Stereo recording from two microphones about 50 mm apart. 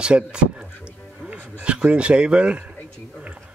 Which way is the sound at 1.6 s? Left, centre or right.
Right.